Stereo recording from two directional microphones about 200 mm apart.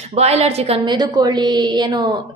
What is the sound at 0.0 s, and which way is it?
A woman's voice, 30° right (ahead or behind).